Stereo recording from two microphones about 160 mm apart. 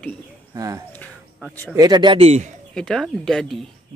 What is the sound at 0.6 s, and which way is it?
Speech, 20° right (ahead or behind).